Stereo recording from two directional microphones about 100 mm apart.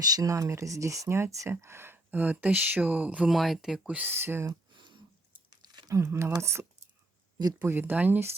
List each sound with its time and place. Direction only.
0.0 s speech: 40° right (ahead or behind); by 3.2 s 15° right (ahead or behind)
3.2 s speech: centre (ahead or behind); by 4.5 s 25° right (ahead or behind)
5.5 s speech: 40° right (ahead or behind); by 8.4 s 20° right (ahead or behind)